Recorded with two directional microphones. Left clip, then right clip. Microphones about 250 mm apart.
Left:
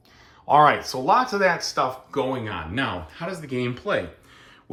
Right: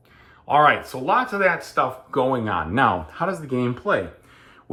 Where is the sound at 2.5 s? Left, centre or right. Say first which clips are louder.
Right 8 dB; centre.